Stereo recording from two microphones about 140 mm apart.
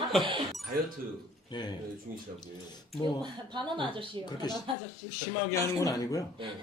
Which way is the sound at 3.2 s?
35° right (ahead or behind).